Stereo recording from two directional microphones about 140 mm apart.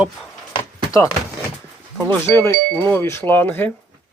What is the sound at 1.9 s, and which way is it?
Speech, 10° left (ahead or behind).